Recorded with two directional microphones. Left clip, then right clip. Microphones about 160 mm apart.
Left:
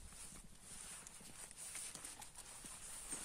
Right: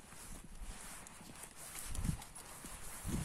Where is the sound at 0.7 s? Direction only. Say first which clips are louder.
Right 4 dB; 65° right (ahead or behind).